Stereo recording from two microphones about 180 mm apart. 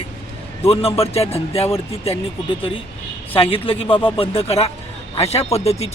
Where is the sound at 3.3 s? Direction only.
30° left (ahead or behind).